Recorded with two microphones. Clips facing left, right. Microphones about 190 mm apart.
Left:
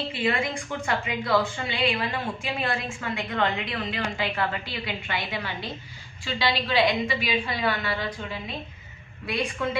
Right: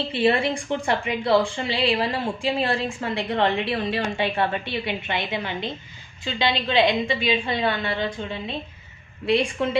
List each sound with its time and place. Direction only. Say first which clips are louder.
0.1 s a woman's voice: right 8 dB; 35° right (ahead or behind)